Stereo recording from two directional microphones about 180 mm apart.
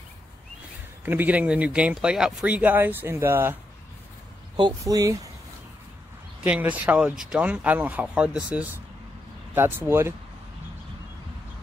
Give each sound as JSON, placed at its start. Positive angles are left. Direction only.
{"t": 1.0, "sound": "speech", "side_deg": -10}
{"t": 4.6, "sound": "speech", "side_deg": -20}
{"t": 6.4, "sound": "speech", "side_deg": -10}